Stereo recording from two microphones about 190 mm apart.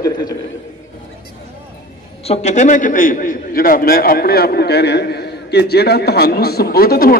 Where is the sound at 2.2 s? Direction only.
35° left (ahead or behind).